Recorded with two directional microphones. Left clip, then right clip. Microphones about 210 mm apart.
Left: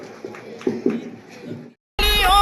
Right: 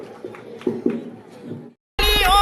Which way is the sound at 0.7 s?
40° right (ahead or behind).